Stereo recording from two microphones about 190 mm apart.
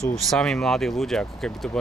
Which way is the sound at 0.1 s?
Centre (ahead or behind).